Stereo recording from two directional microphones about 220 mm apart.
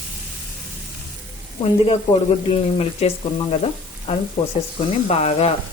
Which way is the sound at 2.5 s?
25° left (ahead or behind).